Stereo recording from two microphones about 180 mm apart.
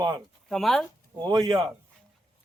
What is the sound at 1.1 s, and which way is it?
Speech, 25° right (ahead or behind).